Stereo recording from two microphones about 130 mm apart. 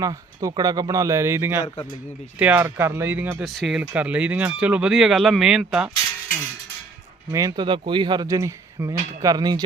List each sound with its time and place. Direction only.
0.0 s speech: 30° right (ahead or behind)
1.6 s a man's voice: 35° left (ahead or behind)
2.4 s speech: 15° right (ahead or behind)
3.4 s speech: centre (ahead or behind)
7.3 s speech: 30° right (ahead or behind)